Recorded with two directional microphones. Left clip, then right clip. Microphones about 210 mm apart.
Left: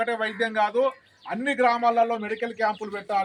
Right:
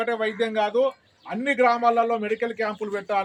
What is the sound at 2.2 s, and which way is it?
Speech, 15° right (ahead or behind).